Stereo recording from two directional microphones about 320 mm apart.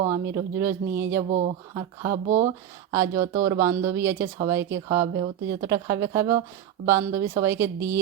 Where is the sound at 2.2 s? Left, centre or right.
Right.